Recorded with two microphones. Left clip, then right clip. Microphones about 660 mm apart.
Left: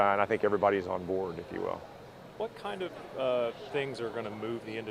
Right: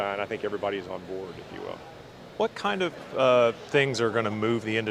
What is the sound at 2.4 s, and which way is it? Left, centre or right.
Speech, right.